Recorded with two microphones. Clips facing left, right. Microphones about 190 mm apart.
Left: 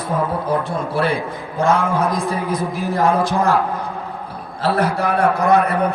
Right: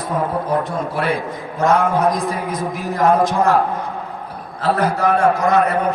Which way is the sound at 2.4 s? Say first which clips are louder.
Left 2 dB; 30° left (ahead or behind).